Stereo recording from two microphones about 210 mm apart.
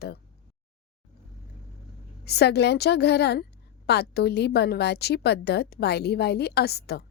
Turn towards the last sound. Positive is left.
turn(degrees=50)  # may be behind; listen again after turning